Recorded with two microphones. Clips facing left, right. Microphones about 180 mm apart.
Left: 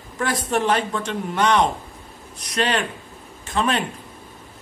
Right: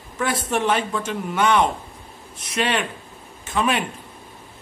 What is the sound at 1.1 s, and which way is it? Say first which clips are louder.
Speech: even; 5° right (ahead or behind).